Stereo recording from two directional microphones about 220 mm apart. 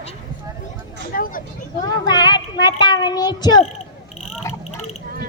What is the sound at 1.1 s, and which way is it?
Speech, 40° left (ahead or behind).